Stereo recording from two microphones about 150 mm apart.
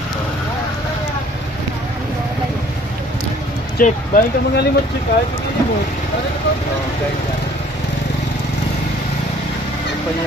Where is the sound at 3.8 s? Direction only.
70° left (ahead or behind).